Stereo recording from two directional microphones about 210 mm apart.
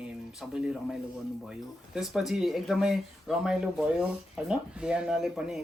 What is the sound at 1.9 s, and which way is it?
Speech, centre (ahead or behind).